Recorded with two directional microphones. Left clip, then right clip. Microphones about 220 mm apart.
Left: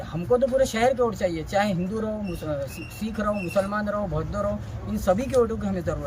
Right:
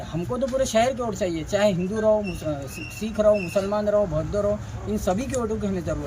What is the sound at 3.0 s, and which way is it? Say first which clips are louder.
Speech: right 7 dB; 15° right (ahead or behind).